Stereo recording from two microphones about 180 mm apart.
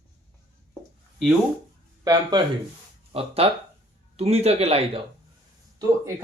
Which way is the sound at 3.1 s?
35° right (ahead or behind).